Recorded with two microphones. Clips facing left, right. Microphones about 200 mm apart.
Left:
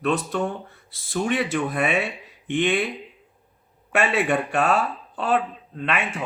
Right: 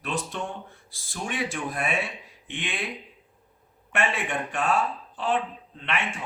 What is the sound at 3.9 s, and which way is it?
Speech, 70° left (ahead or behind).